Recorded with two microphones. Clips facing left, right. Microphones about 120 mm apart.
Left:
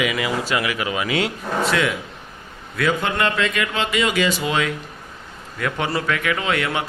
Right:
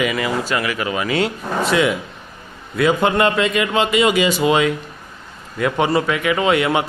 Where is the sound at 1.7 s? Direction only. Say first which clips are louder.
Right 5 dB; 5° right (ahead or behind).